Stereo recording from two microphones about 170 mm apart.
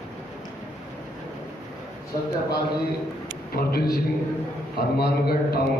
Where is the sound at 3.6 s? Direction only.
65° left (ahead or behind).